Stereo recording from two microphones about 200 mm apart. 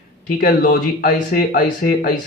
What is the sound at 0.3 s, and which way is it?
Speech, 45° left (ahead or behind).